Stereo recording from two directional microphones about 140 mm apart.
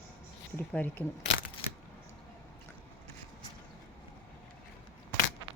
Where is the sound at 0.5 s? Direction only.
10° left (ahead or behind).